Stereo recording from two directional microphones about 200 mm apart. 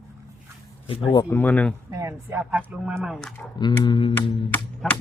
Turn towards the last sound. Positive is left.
turn(degrees=5)  # may be behind; listen again after turning